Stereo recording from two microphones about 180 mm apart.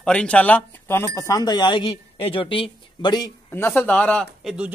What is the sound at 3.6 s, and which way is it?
Speech, 10° left (ahead or behind).